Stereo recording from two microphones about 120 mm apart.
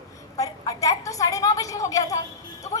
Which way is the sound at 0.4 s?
30° left (ahead or behind).